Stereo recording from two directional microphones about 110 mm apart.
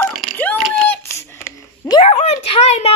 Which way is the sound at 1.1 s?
25° left (ahead or behind).